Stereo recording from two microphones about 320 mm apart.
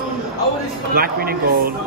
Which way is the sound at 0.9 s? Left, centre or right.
Right.